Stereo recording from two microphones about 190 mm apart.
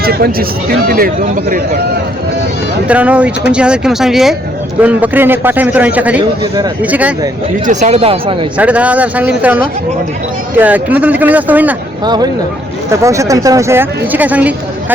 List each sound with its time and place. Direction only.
0.0 s speech: 50° right (ahead or behind)
2.8 s speech: 5° right (ahead or behind)
7.7 s speech: 35° right (ahead or behind)
8.5 s speech: 5° right (ahead or behind)
12.0 s speech: 20° right (ahead or behind)